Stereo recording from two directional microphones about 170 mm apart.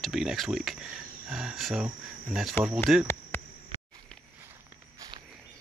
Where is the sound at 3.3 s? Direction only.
10° left (ahead or behind).